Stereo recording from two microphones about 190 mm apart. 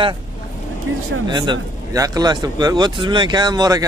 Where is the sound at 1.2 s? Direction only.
25° right (ahead or behind).